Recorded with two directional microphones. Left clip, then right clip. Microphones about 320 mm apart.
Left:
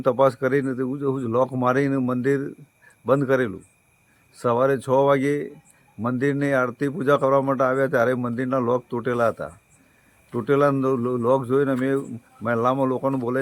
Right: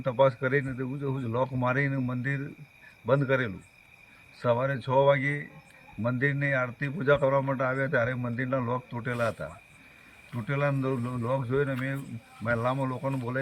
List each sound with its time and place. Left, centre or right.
0.0 s a man's voice: centre